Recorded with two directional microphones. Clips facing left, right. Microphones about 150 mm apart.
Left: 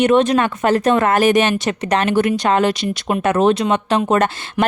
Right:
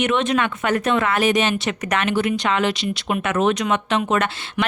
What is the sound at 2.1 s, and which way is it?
Speech, 50° left (ahead or behind).